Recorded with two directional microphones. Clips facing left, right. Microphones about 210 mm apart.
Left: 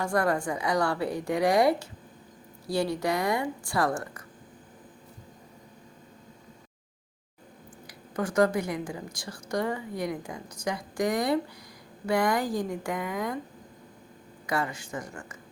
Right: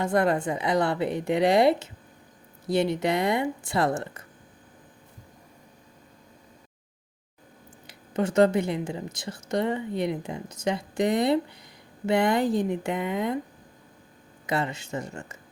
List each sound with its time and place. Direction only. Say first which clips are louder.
0.0 s a woman's voice: right 3 dB; 20° right (ahead or behind)
7.9 s a woman's voice: right 4 dB; 25° right (ahead or behind)
14.4 s a woman's voice: right 2 dB; 25° right (ahead or behind)